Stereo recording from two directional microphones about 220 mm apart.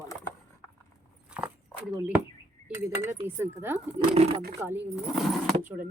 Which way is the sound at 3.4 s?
10° right (ahead or behind).